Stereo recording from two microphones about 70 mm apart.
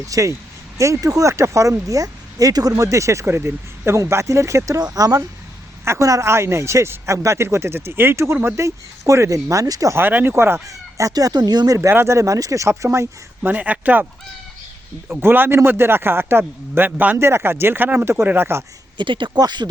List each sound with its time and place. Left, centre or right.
0.1 s speech: right
4.8 s speech: right
5.8 s speech: right
8.4 s speech: right
9.9 s speech: right
10.7 s speech: right
11.8 s speech: right
13.4 s a man's voice: right
15.2 s a man's voice: right
17.2 s speech: right
18.9 s speech: right